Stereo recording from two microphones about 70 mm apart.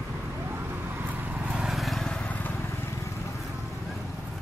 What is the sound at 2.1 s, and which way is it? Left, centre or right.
Vehicle, centre.